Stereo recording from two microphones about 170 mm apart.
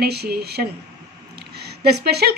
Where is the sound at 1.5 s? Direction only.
75° right (ahead or behind).